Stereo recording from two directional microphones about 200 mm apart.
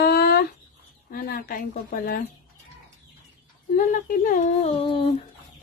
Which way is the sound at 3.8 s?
40° left (ahead or behind).